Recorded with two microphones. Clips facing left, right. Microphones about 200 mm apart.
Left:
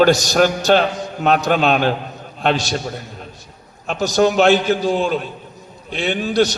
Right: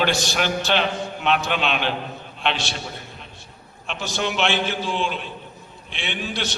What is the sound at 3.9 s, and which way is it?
A man's voice, 40° left (ahead or behind).